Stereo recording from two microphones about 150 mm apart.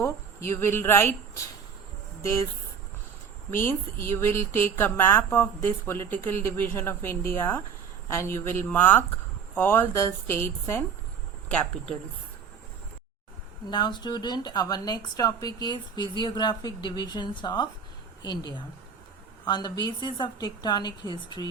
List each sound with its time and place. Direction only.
0.0 s speech: 15° left (ahead or behind)
3.5 s speech: 15° left (ahead or behind)
13.7 s speech: 30° left (ahead or behind)